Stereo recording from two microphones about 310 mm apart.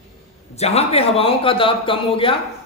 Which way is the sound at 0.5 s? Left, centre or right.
Centre.